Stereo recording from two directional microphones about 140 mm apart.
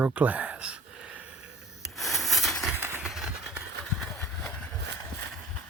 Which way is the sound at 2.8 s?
15° right (ahead or behind).